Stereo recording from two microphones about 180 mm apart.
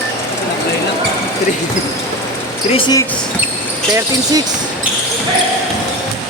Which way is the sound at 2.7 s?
25° left (ahead or behind).